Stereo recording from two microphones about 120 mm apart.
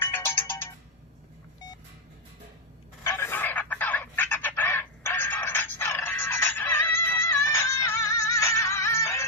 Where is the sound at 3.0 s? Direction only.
20° left (ahead or behind).